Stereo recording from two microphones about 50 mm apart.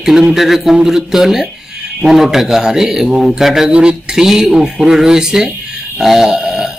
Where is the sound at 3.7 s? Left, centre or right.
Right.